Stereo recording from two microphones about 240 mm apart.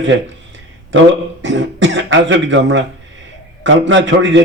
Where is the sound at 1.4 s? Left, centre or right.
Right.